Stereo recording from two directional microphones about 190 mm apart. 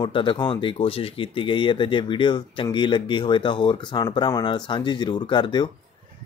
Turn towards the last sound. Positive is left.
turn(degrees=25)  # may be behind; listen again after turning